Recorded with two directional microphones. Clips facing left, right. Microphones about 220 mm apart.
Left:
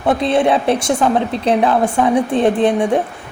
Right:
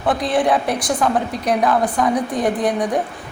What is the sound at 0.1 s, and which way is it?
A woman's voice, 25° left (ahead or behind).